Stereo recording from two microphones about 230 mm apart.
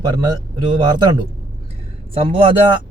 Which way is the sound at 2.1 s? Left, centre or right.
Right.